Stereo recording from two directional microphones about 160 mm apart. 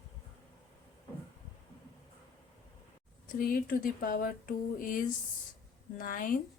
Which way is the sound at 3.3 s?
65° left (ahead or behind).